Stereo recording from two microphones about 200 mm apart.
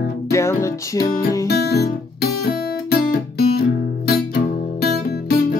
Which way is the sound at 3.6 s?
50° left (ahead or behind).